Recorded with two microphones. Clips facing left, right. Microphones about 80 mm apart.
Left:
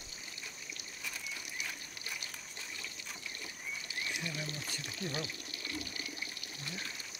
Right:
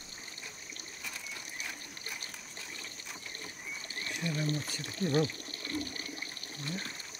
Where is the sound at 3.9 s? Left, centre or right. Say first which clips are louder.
Right 4 dB; right.